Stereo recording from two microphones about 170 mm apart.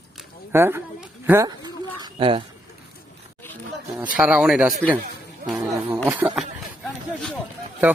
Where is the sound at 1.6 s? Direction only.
30° right (ahead or behind).